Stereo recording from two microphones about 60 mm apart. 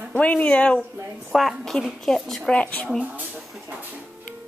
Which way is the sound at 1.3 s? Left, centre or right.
Centre.